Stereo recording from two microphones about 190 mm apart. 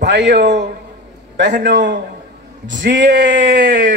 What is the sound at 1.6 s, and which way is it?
Speech, 65° right (ahead or behind).